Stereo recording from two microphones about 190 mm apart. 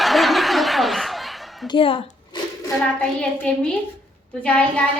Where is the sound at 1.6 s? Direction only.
25° left (ahead or behind).